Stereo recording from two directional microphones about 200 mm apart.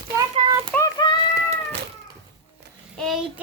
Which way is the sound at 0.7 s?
15° left (ahead or behind).